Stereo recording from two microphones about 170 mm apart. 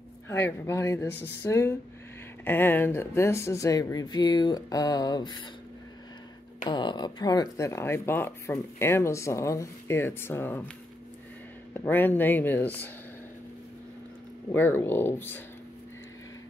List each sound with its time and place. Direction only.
0.3 s speech: 15° left (ahead or behind)
6.6 s speech: 25° left (ahead or behind)
11.7 s speech: 10° left (ahead or behind)
14.5 s speech: 10° left (ahead or behind)